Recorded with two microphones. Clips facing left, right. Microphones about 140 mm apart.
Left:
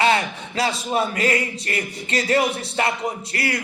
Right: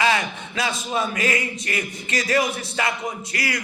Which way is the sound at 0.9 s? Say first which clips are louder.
Left 2 dB; 30° left (ahead or behind).